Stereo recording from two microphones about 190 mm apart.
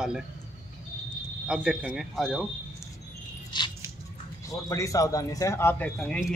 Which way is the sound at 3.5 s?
25° left (ahead or behind).